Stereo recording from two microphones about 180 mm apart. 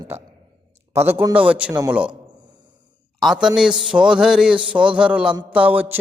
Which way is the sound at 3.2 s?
Centre (ahead or behind).